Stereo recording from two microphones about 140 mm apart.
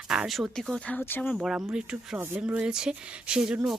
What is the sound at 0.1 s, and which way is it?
Speech, 5° right (ahead or behind).